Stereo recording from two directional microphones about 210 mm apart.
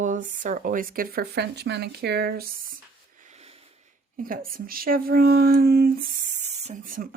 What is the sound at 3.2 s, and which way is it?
Speech, 30° right (ahead or behind).